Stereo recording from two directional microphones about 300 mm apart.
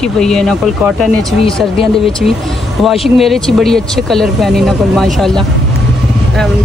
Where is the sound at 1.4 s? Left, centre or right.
Centre.